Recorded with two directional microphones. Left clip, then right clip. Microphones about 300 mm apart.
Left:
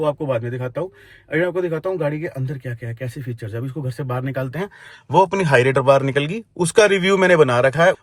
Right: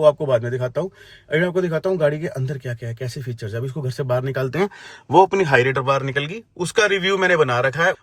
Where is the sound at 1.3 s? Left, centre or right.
Centre.